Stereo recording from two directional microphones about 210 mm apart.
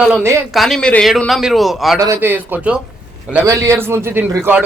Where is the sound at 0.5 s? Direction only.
Centre (ahead or behind).